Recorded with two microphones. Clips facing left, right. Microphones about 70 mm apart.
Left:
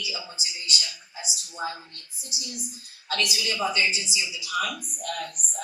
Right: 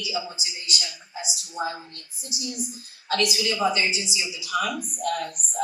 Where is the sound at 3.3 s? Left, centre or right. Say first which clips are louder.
Right 3 dB; right.